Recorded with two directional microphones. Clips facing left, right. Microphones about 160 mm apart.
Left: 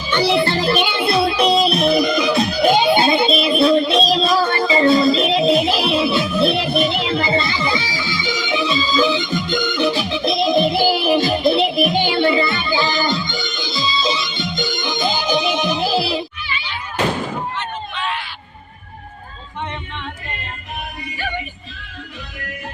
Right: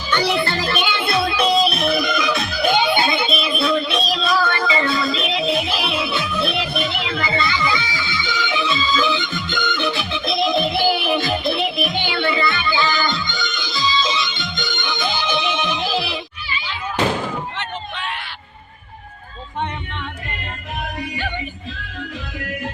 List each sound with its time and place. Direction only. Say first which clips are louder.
0.1 s music: left 3 dB; 30° left (ahead or behind)
8.2 s music: left 2 dB; 20° left (ahead or behind)
17.6 s a sound: left 2 dB; 60° right (ahead or behind)